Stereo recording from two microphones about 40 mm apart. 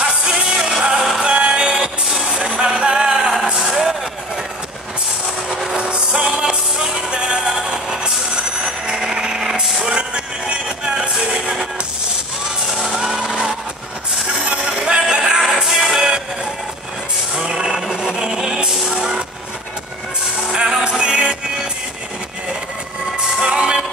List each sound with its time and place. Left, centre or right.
0.0 s music: right
1.2 s music: right
3.5 s a sound: centre
5.5 s music: centre
5.8 s music: right
6.2 s music: centre
8.6 s vehicle: centre
9.8 s music: right
12.7 s music: centre
13.2 s music: right
15.4 s music: centre
17.4 s music: centre
20.5 s music: centre
23.1 s music: right